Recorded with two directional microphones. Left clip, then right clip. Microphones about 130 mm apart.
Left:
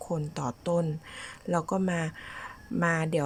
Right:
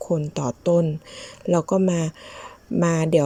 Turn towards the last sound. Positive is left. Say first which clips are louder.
# right 8 dB
turn(degrees=-25)  # may be behind; listen again after turning